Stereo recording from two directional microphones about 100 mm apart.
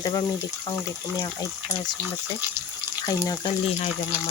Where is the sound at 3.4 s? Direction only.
75° left (ahead or behind).